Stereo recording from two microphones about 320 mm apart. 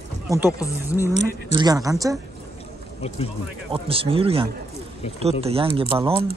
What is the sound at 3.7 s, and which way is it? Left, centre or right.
Speech, centre.